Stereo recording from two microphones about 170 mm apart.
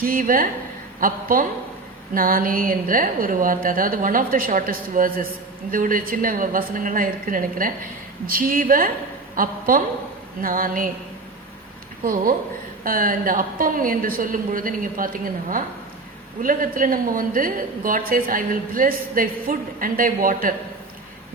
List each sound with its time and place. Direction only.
0.0 s a woman's voice: 55° right (ahead or behind)
12.0 s a woman's voice: 55° right (ahead or behind)